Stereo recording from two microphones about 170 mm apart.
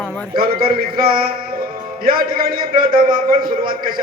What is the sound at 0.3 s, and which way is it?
A man's voice, 60° right (ahead or behind).